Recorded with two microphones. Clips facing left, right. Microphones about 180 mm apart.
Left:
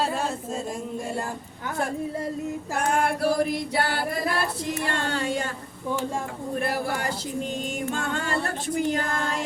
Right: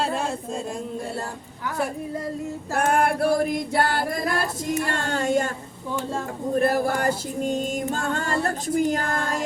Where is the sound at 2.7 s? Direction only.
50° right (ahead or behind).